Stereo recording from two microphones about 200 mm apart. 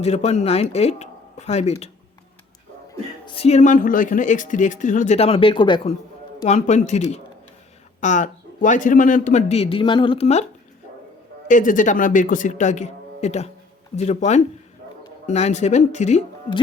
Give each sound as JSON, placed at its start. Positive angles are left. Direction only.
{"t": 0.0, "sound": "speech", "side_deg": 35}
{"t": 3.2, "sound": "speech", "side_deg": 30}
{"t": 6.4, "sound": "speech", "side_deg": 35}
{"t": 11.4, "sound": "speech", "side_deg": 40}